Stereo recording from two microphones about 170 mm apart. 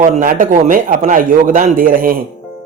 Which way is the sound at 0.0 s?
50° right (ahead or behind).